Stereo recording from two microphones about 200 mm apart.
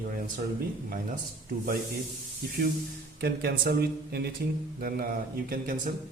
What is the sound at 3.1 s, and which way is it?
A man's voice, 50° right (ahead or behind).